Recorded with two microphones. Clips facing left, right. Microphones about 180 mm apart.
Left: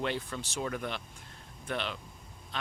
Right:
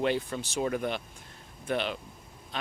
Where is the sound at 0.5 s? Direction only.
20° right (ahead or behind).